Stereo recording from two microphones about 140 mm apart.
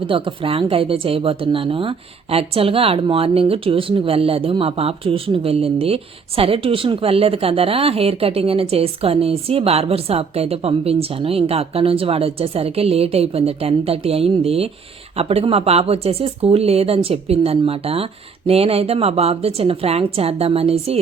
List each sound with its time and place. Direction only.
0.1 s speech: 40° right (ahead or behind)